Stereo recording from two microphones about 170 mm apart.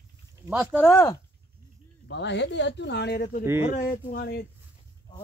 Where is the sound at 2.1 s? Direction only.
90° left; by 3.4 s 70° left (ahead or behind).